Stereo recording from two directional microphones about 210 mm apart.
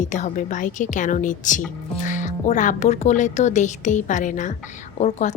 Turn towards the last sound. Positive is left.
turn(degrees=35)  # may be behind; listen again after turning